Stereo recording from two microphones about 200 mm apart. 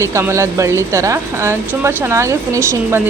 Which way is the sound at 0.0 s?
15° right (ahead or behind).